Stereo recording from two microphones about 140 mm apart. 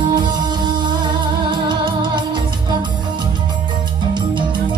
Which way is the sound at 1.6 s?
35° right (ahead or behind).